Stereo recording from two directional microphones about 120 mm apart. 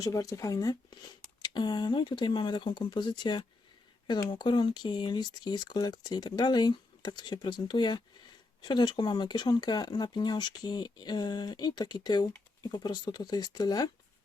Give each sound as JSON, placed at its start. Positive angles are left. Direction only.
{"t": 0.0, "sound": "speech", "side_deg": 30}